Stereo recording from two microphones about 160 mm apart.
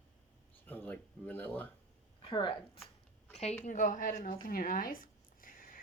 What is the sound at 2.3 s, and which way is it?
Speech, 30° left (ahead or behind).